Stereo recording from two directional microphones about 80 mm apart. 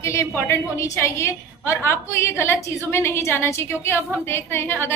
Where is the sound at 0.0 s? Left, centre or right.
Left.